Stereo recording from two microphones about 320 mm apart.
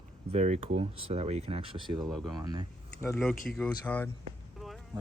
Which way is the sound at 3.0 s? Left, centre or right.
Centre.